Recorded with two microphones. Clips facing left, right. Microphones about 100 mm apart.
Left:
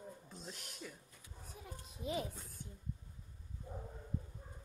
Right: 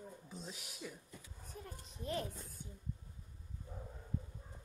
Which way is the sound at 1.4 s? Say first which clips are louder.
Even; 5° left (ahead or behind).